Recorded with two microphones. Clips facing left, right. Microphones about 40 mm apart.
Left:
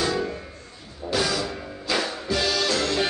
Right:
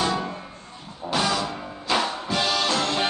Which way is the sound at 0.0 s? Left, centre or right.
Centre.